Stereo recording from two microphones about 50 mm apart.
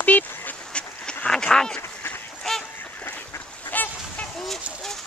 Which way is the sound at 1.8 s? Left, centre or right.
Left.